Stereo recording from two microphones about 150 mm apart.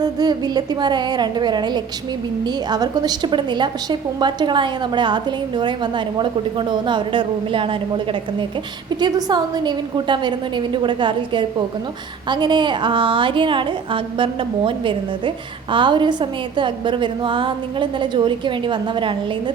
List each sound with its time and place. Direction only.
0.0 s a woman's voice: 25° right (ahead or behind)